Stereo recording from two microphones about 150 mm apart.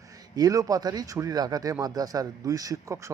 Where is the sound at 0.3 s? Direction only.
25° right (ahead or behind).